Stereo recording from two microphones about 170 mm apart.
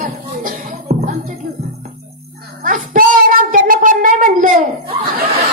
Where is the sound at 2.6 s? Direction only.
50° right (ahead or behind).